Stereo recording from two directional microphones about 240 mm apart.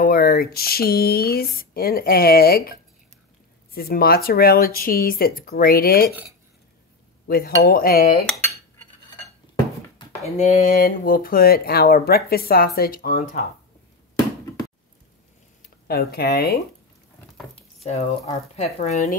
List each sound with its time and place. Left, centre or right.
0.0 s speech: left
7.2 s speech: left
9.9 s speech: left
15.9 s speech: left
17.8 s speech: left